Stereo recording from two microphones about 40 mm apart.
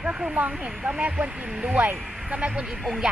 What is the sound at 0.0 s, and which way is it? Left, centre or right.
Speech, right.